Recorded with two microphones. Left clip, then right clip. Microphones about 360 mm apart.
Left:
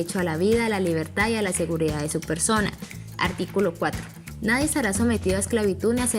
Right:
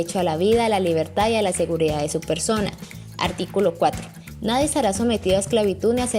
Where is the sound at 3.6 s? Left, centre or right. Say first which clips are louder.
Right 5 dB; right.